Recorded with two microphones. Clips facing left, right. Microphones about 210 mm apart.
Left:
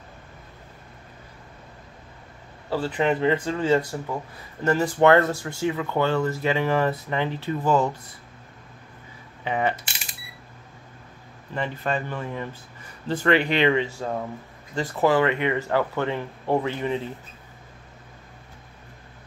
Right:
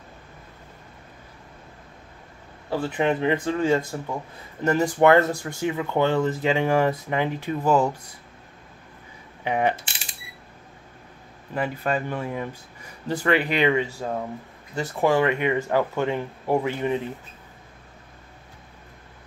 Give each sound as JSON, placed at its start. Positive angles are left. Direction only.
{"t": 2.7, "sound": "speech", "side_deg": -15}
{"t": 9.4, "sound": "speech", "side_deg": -15}
{"t": 11.5, "sound": "speech", "side_deg": -10}